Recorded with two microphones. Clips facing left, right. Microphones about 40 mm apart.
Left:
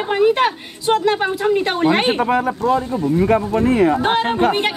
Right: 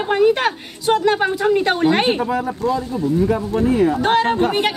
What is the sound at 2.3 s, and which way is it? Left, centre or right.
Speech, left.